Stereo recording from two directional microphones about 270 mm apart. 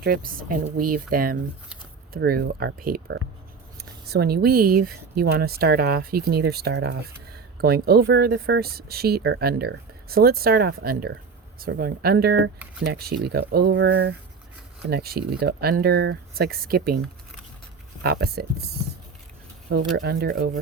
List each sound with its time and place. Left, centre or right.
0.0 s speech: right
18.0 s speech: right
20.0 s speech: right